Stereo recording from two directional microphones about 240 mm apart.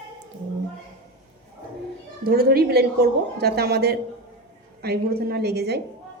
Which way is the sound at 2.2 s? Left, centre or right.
Right.